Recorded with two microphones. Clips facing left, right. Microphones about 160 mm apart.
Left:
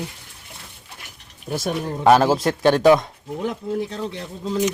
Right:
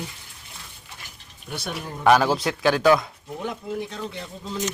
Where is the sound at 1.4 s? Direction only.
45° left (ahead or behind).